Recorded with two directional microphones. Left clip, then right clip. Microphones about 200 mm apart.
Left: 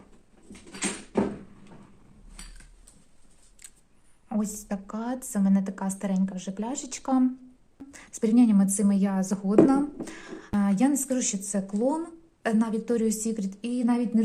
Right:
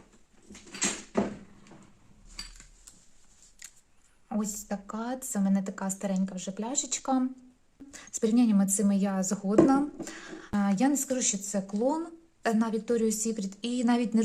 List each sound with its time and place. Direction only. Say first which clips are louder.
4.3 s a woman's voice: left 2 dB; 10° right (ahead or behind)